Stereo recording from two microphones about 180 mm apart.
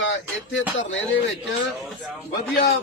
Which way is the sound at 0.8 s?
90° left.